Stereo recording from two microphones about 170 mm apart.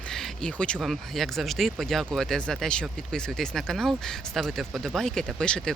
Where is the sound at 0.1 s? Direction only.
5° left (ahead or behind).